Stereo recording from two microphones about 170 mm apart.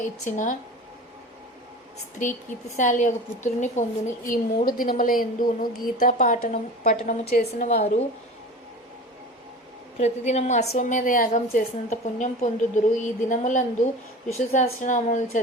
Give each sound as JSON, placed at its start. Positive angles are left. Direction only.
{"t": 0.3, "sound": "a woman's voice", "side_deg": 50}
{"t": 2.2, "sound": "a woman's voice", "side_deg": 50}
{"t": 7.7, "sound": "a woman's voice", "side_deg": 40}
{"t": 10.0, "sound": "a woman's voice", "side_deg": 40}